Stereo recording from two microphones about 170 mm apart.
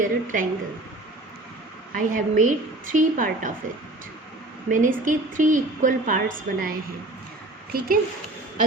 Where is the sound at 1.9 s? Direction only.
50° right (ahead or behind).